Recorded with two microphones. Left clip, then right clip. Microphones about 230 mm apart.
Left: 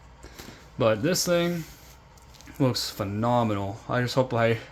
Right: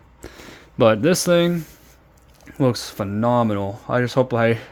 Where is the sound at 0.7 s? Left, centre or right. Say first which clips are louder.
Right 7 dB; right.